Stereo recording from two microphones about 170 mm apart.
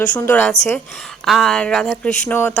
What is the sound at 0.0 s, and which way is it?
Speech, 10° left (ahead or behind).